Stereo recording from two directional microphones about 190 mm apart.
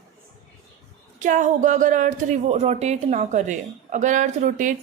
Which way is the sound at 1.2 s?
40° right (ahead or behind).